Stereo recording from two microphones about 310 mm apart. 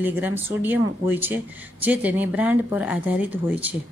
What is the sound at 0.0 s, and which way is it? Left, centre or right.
Speech, centre.